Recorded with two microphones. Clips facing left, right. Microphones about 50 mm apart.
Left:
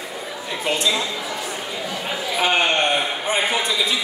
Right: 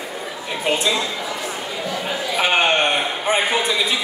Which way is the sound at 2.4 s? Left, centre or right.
Right.